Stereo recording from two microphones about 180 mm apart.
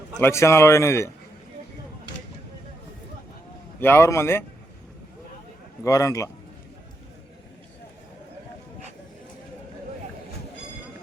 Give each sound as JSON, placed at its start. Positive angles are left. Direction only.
{"t": 0.2, "sound": "speech", "side_deg": 15}
{"t": 3.8, "sound": "speech", "side_deg": 15}
{"t": 5.8, "sound": "speech", "side_deg": 15}